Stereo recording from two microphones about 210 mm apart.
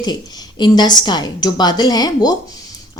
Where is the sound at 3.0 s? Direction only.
20° left (ahead or behind).